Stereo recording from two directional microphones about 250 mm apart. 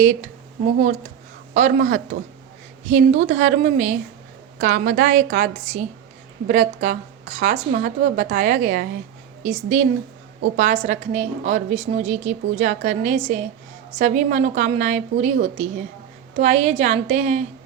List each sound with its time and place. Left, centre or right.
1.5 s a woman's voice: right